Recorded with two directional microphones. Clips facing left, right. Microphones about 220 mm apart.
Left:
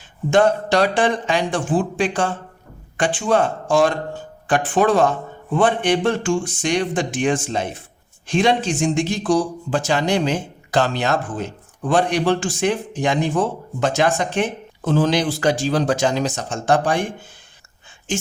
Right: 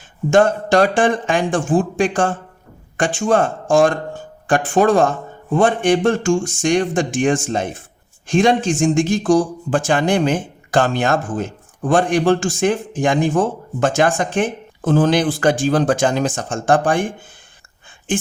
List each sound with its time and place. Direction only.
0.3 s speech: 50° right (ahead or behind)